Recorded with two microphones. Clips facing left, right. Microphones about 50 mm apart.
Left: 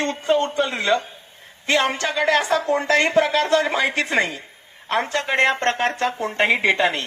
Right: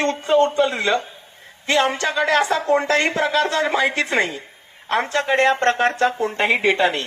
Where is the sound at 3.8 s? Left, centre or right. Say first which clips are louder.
Right 1 dB; left.